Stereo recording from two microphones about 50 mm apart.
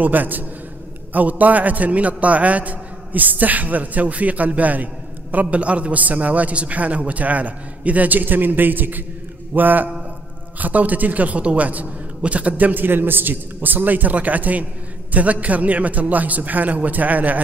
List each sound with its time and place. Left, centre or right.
0.0 s a man's voice: right